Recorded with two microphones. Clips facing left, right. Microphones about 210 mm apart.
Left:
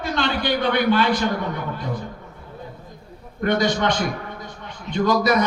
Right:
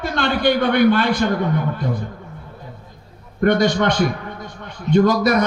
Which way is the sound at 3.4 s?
50° right (ahead or behind).